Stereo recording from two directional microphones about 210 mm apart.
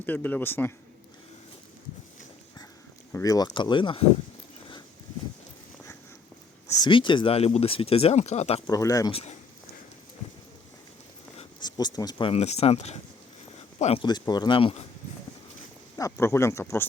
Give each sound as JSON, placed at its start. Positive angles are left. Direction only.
{"t": 0.0, "sound": "speech", "side_deg": 10}
{"t": 3.1, "sound": "speech", "side_deg": 15}
{"t": 6.7, "sound": "speech", "side_deg": 20}
{"t": 8.6, "sound": "speech", "side_deg": 15}
{"t": 9.1, "sound": "speech", "side_deg": 30}
{"t": 11.3, "sound": "speech", "side_deg": 20}
{"t": 16.0, "sound": "speech", "side_deg": 15}